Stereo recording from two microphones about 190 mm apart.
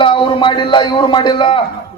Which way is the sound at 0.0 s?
25° left (ahead or behind).